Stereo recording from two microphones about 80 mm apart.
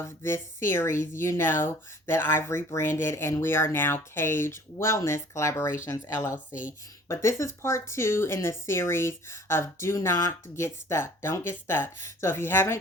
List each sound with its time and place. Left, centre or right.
0.0 s speech: left